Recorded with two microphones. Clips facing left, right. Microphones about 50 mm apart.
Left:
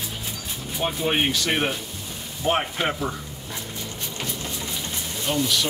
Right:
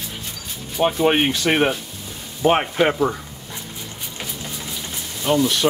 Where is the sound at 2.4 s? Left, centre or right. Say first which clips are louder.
Right 6 dB; right.